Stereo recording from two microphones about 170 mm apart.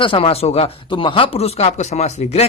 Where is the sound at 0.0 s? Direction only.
35° left (ahead or behind).